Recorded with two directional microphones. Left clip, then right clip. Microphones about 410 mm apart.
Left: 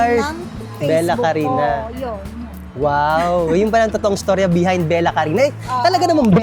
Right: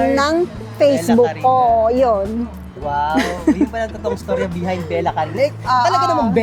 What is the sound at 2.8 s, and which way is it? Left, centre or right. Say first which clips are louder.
Speech: left 3 dB; left.